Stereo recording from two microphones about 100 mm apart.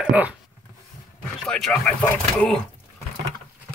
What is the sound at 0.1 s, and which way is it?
Speech, 15° right (ahead or behind).